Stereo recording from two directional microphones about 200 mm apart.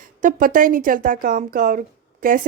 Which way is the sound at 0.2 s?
40° right (ahead or behind).